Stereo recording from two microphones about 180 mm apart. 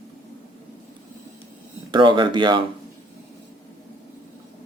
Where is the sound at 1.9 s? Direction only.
25° right (ahead or behind).